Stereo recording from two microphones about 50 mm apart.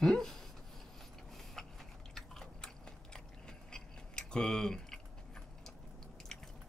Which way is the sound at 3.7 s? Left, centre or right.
Centre.